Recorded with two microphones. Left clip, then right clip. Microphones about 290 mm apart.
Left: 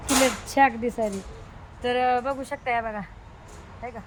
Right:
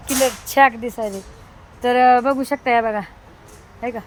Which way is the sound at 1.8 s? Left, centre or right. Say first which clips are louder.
Right 9 dB; centre.